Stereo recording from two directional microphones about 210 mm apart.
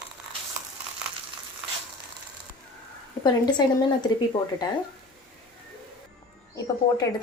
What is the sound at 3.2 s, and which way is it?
Speech, 20° left (ahead or behind).